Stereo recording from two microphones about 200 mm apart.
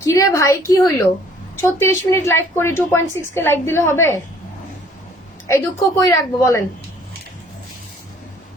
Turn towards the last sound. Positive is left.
turn(degrees=15)  # may be behind; listen again after turning